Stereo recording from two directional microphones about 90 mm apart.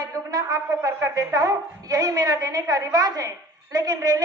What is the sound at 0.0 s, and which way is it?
Speech, 40° right (ahead or behind).